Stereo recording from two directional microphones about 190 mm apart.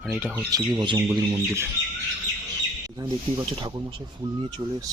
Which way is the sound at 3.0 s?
25° right (ahead or behind).